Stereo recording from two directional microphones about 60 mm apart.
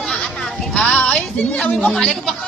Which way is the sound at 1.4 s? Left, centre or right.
Left.